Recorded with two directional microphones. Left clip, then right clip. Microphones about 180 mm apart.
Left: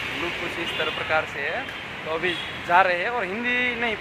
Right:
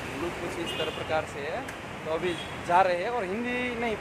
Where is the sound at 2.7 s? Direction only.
Centre (ahead or behind).